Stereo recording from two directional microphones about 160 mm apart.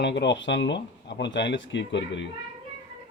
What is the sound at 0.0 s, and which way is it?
Speech, 90° left.